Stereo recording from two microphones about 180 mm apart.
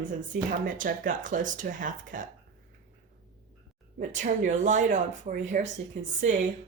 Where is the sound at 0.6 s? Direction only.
50° right (ahead or behind).